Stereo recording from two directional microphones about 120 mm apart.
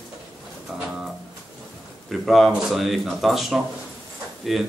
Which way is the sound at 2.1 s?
Centre (ahead or behind).